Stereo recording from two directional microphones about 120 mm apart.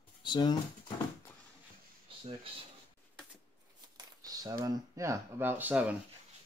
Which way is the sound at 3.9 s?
30° right (ahead or behind).